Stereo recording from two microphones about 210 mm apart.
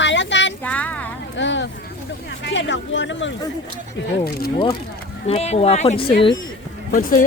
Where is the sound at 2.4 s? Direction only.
60° left (ahead or behind).